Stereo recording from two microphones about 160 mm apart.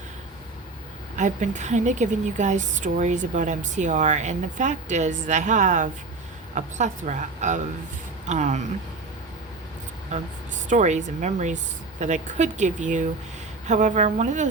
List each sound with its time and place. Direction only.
1.1 s a woman's voice: 50° right (ahead or behind)
10.7 s a woman's voice: 45° right (ahead or behind)